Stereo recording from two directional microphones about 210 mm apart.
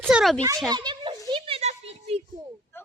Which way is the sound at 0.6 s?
20° right (ahead or behind).